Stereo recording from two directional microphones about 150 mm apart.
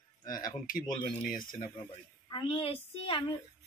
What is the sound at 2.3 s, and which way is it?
Speech, 35° left (ahead or behind).